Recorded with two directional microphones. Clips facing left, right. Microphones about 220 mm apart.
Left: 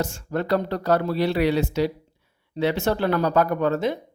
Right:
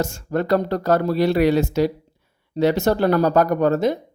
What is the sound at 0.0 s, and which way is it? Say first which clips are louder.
Speech: right 4 dB; 45° right (ahead or behind).